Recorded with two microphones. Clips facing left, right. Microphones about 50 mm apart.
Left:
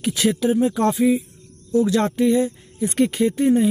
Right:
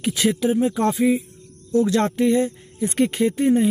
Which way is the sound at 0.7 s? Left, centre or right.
Right.